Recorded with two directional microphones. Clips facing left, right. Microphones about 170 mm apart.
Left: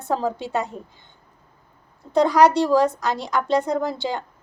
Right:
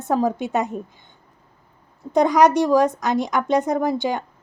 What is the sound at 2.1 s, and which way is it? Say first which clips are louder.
A woman's voice: right 1 dB; 20° right (ahead or behind).